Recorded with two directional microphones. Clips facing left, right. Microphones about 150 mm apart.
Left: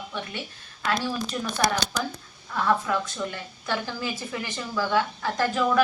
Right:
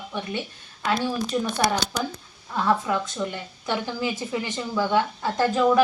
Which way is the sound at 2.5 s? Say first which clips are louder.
Right 1 dB; 15° right (ahead or behind).